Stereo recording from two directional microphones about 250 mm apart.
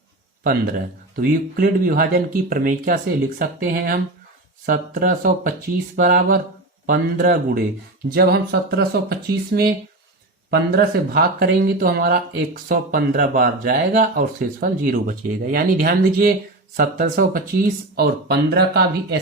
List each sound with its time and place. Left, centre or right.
0.4 s speech: right